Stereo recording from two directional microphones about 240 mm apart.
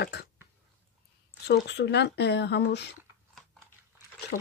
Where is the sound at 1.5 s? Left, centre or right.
Left.